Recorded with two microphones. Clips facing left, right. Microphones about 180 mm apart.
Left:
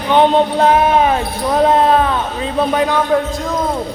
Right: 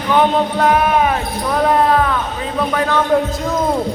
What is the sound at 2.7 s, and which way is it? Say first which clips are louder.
Music: left 1 dB; 20° left (ahead or behind).